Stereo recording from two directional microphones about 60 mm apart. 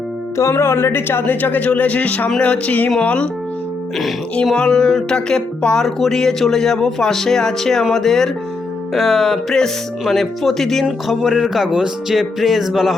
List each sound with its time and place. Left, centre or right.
0.3 s speech: left
1.2 s speech: left
4.5 s speech: centre